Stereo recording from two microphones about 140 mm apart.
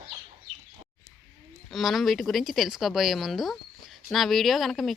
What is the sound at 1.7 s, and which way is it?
Speech, centre (ahead or behind).